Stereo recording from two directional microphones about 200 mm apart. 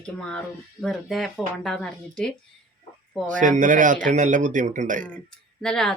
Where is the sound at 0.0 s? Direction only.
5° left (ahead or behind).